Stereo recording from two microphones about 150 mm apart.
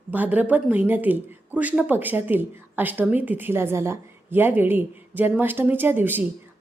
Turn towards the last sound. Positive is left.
turn(degrees=-15)  # may be behind; listen again after turning